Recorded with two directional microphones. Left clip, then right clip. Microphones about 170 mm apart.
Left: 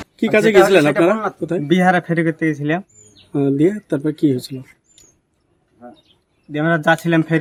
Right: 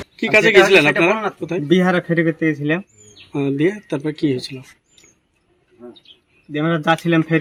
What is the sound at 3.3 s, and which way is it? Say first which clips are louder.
Speech: left 3 dB; 90° left.